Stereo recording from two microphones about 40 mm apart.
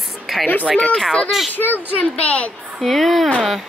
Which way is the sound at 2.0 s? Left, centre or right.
Left.